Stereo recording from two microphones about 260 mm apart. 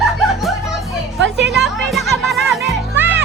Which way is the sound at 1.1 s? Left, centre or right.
Right.